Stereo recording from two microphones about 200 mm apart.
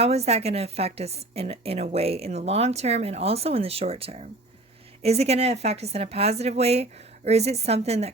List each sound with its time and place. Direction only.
0.0 s a woman's voice: 30° right (ahead or behind)